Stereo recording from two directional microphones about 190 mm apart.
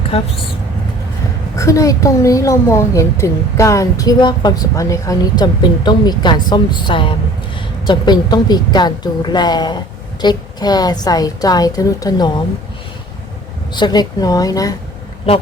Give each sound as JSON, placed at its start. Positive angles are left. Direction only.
{"t": 1.5, "sound": "a woman's voice", "side_deg": 15}
{"t": 13.7, "sound": "a woman's voice", "side_deg": 20}